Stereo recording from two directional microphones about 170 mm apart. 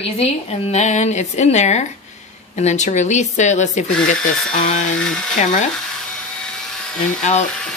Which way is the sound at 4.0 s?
5° left (ahead or behind).